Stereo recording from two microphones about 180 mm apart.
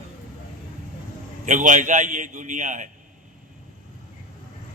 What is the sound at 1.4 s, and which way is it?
A man's voice, 45° right (ahead or behind).